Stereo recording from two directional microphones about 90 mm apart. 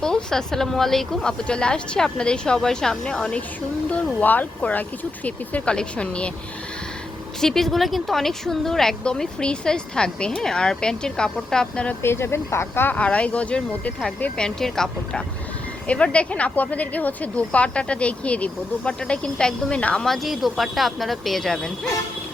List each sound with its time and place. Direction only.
0.0 s speech: 5° left (ahead or behind)
7.4 s speech: 5° left (ahead or behind)
12.0 s speech: 30° left (ahead or behind); by 21.7 s 5° left (ahead or behind)